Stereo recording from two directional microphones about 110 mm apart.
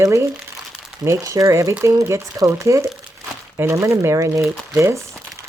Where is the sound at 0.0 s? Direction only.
25° right (ahead or behind).